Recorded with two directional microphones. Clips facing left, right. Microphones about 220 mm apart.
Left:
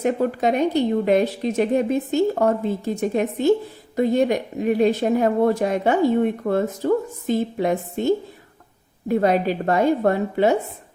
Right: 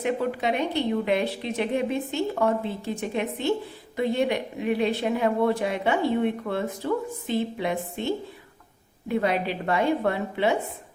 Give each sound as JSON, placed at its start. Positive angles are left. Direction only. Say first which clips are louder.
{"t": 0.0, "sound": "a woman's voice", "louder": "left 5 dB", "side_deg": 45}